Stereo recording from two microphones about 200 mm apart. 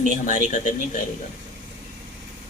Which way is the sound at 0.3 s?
40° left (ahead or behind).